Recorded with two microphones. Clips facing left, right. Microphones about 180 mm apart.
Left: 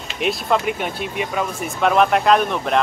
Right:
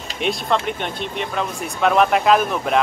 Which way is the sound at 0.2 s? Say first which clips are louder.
Left 1 dB; 5° left (ahead or behind).